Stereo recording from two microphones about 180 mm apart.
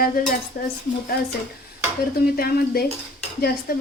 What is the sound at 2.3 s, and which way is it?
Speech, 60° left (ahead or behind).